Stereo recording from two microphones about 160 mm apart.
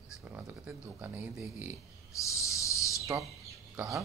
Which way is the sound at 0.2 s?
10° right (ahead or behind).